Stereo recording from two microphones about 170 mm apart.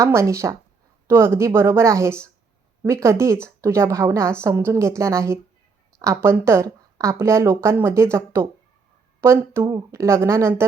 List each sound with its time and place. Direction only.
0.0 s speech: 15° right (ahead or behind)